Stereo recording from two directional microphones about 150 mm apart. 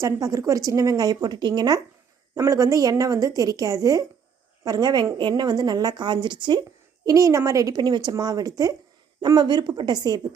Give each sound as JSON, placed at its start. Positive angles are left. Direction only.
{"t": 0.0, "sound": "a woman's voice", "side_deg": -20}